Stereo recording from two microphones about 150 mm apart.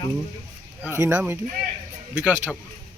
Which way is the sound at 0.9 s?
20° right (ahead or behind).